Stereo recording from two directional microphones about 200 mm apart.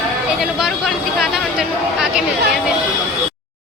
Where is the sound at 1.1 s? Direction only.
5° right (ahead or behind).